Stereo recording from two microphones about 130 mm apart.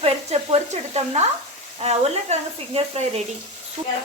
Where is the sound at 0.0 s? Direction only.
55° right (ahead or behind).